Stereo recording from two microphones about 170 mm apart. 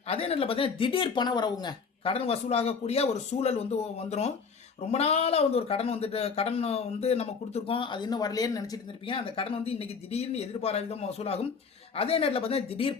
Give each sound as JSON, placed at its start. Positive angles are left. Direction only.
{"t": 0.1, "sound": "speech", "side_deg": 35}